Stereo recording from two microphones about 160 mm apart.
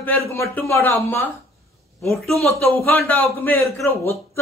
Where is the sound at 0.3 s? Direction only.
15° left (ahead or behind).